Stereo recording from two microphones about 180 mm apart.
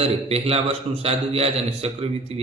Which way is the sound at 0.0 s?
35° right (ahead or behind).